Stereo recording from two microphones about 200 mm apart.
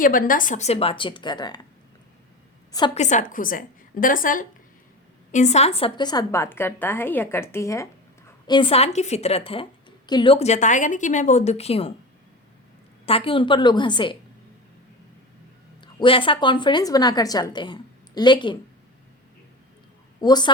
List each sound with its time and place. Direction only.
0.0 s a woman's voice: 45° left (ahead or behind); by 1.6 s 20° left (ahead or behind)
2.9 s a woman's voice: 35° left (ahead or behind)
13.1 s a woman's voice: 25° left (ahead or behind)
16.0 s a woman's voice: 25° left (ahead or behind)
20.2 s a woman's voice: 20° left (ahead or behind)